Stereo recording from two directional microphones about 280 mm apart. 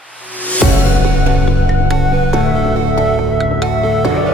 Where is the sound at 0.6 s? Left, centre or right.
Centre.